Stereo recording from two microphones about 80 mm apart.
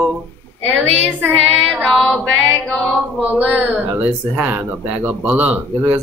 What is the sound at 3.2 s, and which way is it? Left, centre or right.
Speech, centre.